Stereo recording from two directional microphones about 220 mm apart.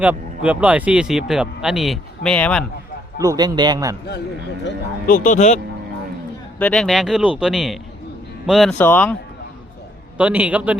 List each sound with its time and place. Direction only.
0.0 s speech: 5° right (ahead or behind)
3.2 s a man's voice: 15° right (ahead or behind)
5.0 s speech: 35° left (ahead or behind)
6.6 s speech: 5° left (ahead or behind)
10.2 s a man's voice: 5° right (ahead or behind)